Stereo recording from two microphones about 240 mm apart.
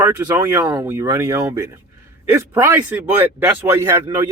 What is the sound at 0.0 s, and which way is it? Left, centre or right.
Speech, centre.